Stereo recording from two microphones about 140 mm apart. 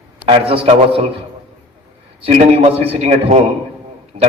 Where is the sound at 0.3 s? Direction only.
40° right (ahead or behind).